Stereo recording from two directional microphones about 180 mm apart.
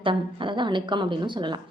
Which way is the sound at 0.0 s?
25° right (ahead or behind).